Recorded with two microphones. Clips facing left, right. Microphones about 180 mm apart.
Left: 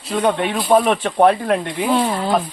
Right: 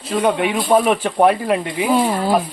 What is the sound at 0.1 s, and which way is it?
Speech, 5° right (ahead or behind).